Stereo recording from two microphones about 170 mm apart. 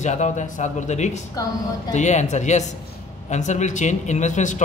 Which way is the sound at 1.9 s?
45° left (ahead or behind).